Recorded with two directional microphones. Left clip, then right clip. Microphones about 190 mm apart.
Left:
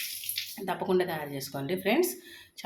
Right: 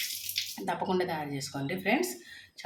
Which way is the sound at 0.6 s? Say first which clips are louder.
Left 3 dB; 15° left (ahead or behind).